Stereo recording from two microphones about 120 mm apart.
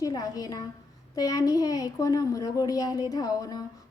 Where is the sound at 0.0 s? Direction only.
30° left (ahead or behind).